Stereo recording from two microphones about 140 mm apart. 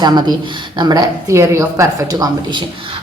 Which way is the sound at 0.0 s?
30° right (ahead or behind).